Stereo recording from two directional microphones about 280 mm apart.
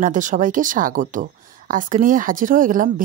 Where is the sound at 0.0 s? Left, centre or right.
Right.